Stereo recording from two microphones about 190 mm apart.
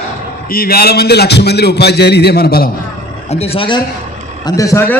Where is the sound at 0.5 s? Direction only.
50° left (ahead or behind).